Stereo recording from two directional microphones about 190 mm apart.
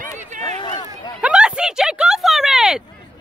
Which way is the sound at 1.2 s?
5° right (ahead or behind).